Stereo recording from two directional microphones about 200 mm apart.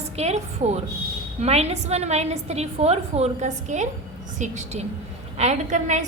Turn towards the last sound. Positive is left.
turn(degrees=-35)  # may be behind; listen again after turning